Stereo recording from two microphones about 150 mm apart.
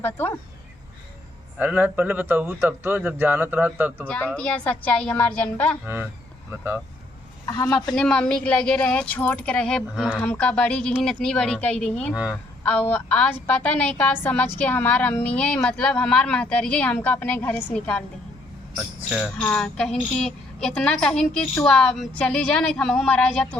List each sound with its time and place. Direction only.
0.0 s a woman's voice: 15° left (ahead or behind)
1.5 s speech: 10° right (ahead or behind)
4.0 s a woman's voice: 10° left (ahead or behind)
5.8 s speech: 15° right (ahead or behind)
7.4 s a woman's voice: 20° left (ahead or behind)
7.9 s a woman's voice: 5° left (ahead or behind)
12.1 s speech: 10° right (ahead or behind)
12.6 s a woman's voice: 10° left (ahead or behind)
19.0 s speech: 5° right (ahead or behind)
19.4 s a woman's voice: 10° left (ahead or behind)